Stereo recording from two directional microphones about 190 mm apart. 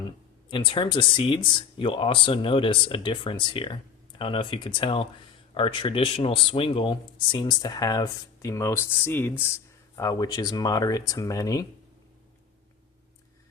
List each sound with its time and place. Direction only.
0.5 s speech: 25° left (ahead or behind)